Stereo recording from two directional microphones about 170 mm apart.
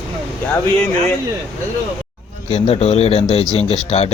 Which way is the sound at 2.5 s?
40° left (ahead or behind).